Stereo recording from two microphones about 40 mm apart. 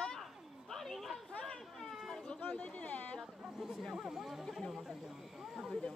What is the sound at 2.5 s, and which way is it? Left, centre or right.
Speech, left.